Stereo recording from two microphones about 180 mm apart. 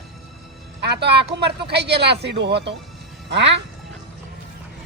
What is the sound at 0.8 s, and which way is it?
Speech, 65° right (ahead or behind).